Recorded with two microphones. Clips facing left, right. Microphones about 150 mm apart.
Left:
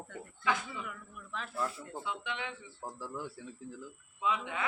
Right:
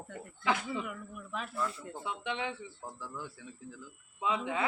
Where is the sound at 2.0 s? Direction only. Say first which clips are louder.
Right 4 dB; 30° right (ahead or behind).